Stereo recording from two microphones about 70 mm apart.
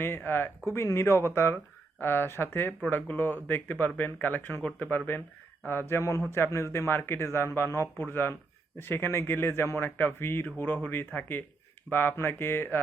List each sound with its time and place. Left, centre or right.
0.3 s speech: left